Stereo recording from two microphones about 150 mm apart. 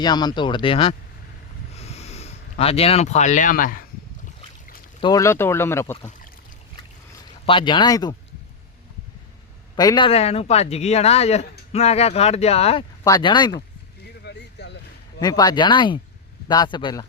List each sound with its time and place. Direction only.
0.0 s speech: 30° left (ahead or behind)
1.7 s a sound: 45° left (ahead or behind); by 3.8 s 70° left (ahead or behind)
4.9 s speech: 25° left (ahead or behind)
7.4 s speech: 35° left (ahead or behind)
9.7 s speech: 30° left (ahead or behind)
10.1 s speech: 40° left (ahead or behind)
13.1 s speech: 30° left (ahead or behind)
15.2 s speech: 25° left (ahead or behind)